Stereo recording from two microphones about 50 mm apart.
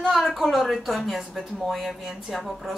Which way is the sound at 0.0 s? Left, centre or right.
Centre.